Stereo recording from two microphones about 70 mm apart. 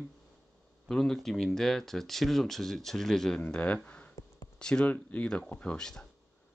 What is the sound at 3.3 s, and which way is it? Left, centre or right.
A man's voice, centre.